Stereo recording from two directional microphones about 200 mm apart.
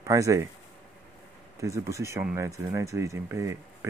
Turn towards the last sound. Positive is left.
turn(degrees=-15)  # may be behind; listen again after turning